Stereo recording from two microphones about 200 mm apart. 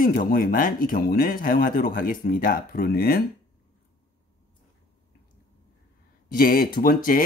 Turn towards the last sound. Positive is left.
turn(degrees=45)  # may be behind; listen again after turning